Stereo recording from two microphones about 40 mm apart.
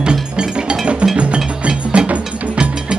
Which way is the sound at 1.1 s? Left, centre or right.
Right.